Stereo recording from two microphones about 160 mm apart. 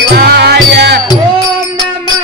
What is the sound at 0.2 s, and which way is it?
Music, 90° right.